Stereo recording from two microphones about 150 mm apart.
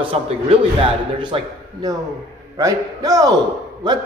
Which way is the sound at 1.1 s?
30° right (ahead or behind).